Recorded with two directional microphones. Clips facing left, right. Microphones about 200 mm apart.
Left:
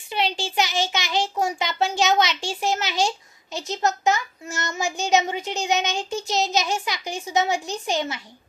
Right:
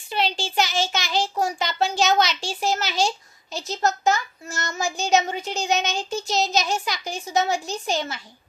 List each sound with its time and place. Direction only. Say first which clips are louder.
0.1 s a child's voice: even; 15° left (ahead or behind)